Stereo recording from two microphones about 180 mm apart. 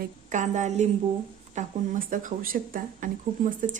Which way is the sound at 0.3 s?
40° right (ahead or behind).